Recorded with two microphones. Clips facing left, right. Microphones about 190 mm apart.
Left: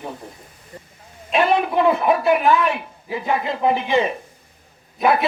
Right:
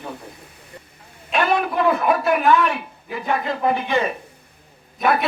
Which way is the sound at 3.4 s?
25° left (ahead or behind).